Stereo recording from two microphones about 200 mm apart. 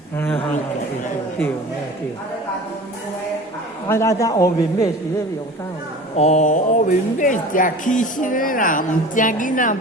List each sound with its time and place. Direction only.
3.8 s speech: 15° left (ahead or behind)
6.1 s speech: 35° left (ahead or behind)